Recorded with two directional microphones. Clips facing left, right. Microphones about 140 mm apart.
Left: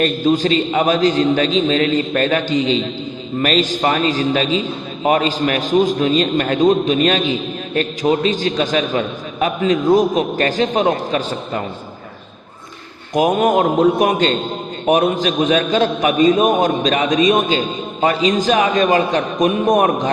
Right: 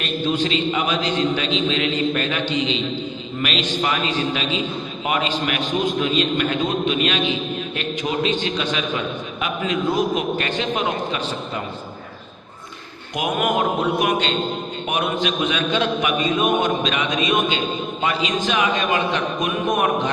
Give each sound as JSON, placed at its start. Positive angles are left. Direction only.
{"t": 0.0, "sound": "a man's voice", "side_deg": 40}
{"t": 13.1, "sound": "a man's voice", "side_deg": 35}